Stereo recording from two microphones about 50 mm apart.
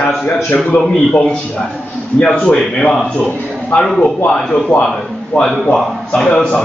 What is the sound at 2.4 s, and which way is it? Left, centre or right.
A man's voice, centre.